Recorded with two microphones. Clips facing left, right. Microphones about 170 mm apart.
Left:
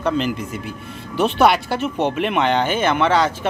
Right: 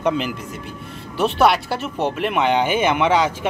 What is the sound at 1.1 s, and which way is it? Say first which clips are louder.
Speech: left 1 dB; centre (ahead or behind).